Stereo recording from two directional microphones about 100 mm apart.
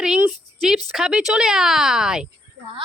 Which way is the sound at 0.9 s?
5° right (ahead or behind).